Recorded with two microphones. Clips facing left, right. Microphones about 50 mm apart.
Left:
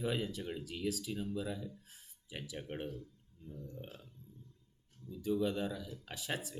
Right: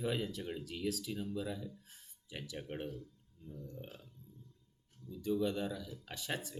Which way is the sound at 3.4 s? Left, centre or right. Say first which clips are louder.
Even; left.